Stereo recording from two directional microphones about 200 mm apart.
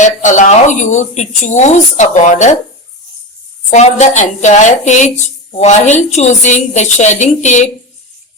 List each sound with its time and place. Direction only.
0.0 s speech: 40° left (ahead or behind)
3.7 s speech: 35° left (ahead or behind)